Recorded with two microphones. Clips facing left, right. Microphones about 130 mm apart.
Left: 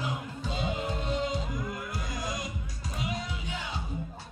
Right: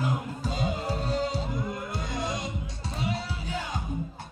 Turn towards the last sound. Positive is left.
turn(degrees=-30)  # may be behind; listen again after turning